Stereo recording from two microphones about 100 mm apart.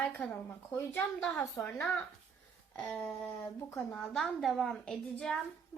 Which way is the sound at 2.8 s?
15° left (ahead or behind).